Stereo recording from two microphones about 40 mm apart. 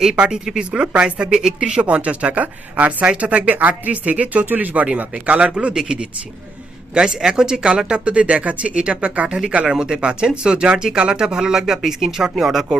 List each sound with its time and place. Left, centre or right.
0.2 s speech: centre; by 5.5 s right
5.5 s speech: right
9.6 s speech: centre